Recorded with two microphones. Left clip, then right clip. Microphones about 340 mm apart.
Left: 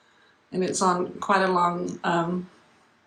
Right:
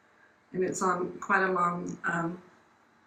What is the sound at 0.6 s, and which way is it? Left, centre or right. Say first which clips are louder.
Speech: left 5 dB; centre.